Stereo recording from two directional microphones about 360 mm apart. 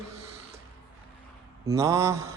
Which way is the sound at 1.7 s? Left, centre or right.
Centre.